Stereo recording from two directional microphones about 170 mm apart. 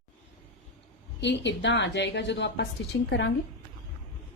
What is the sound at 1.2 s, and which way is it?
A woman's voice, 90° left.